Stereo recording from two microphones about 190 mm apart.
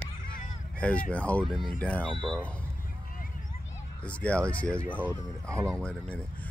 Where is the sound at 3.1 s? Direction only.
45° left (ahead or behind).